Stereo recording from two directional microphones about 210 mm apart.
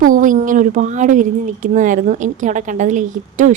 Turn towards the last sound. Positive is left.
turn(degrees=-35)  # may be behind; listen again after turning